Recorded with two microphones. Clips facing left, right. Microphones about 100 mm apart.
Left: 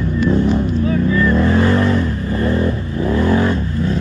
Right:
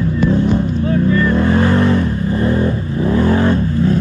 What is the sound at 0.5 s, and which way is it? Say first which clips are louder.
Vehicle: right 1 dB; 35° right (ahead or behind).